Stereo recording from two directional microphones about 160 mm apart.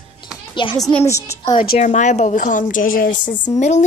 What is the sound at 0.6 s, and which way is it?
Speech, 30° left (ahead or behind).